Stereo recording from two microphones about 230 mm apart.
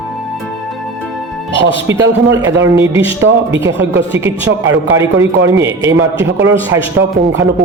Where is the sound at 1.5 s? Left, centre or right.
Right.